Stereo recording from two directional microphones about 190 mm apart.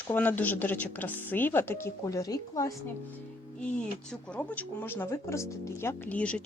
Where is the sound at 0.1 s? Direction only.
10° left (ahead or behind).